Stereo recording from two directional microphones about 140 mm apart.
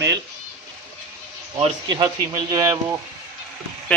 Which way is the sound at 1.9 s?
30° right (ahead or behind).